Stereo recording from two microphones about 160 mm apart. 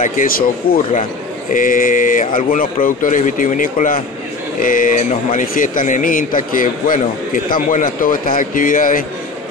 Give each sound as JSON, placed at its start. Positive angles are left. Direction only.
{"t": 0.0, "sound": "speech", "side_deg": 60}